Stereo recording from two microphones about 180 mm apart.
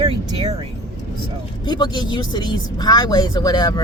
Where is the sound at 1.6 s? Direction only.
25° left (ahead or behind).